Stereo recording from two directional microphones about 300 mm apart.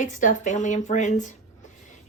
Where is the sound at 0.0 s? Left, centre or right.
Left.